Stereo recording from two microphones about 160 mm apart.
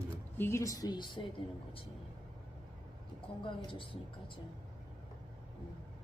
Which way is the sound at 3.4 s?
30° left (ahead or behind).